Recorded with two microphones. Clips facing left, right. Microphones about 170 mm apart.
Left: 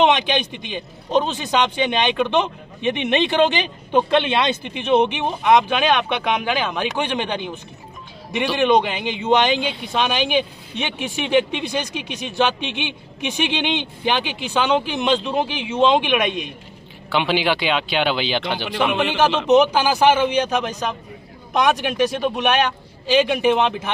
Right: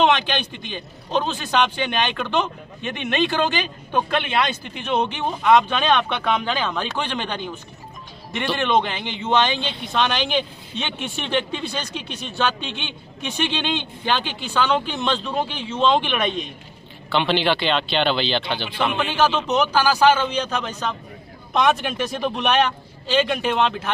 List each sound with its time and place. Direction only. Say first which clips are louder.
0.0 s speech: left 2 dB; 15° left (ahead or behind)